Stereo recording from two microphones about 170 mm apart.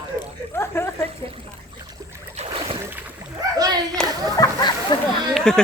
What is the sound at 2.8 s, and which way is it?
Boat, 10° right (ahead or behind).